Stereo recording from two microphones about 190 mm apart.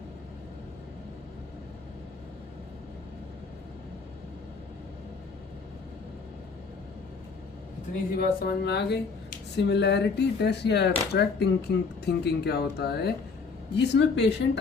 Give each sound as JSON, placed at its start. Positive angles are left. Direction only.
{"t": 8.1, "sound": "speech", "side_deg": 50}